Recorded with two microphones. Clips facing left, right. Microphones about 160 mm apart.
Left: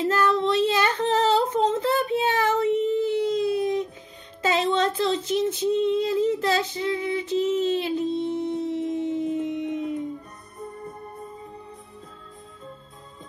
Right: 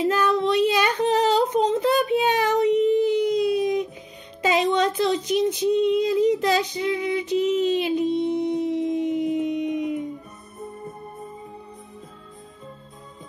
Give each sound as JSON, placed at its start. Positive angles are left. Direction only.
{"t": 0.0, "sound": "humming", "side_deg": -15}
{"t": 4.4, "sound": "female singing", "side_deg": -15}